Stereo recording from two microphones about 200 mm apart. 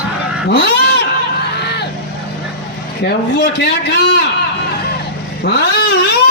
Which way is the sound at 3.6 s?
55° left (ahead or behind).